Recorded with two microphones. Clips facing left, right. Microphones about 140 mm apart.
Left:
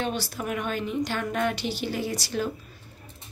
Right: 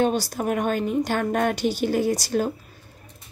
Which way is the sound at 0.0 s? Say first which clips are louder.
Right 7 dB; 40° right (ahead or behind).